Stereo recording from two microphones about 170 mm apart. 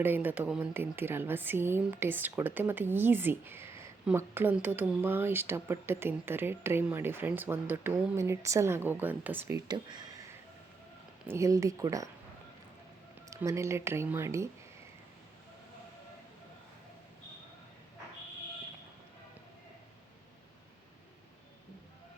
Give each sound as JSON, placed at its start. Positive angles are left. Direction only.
{"t": 0.0, "sound": "speech", "side_deg": -10}
{"t": 9.6, "sound": "speech", "side_deg": -25}
{"t": 11.3, "sound": "speech", "side_deg": -20}
{"t": 13.3, "sound": "speech", "side_deg": -20}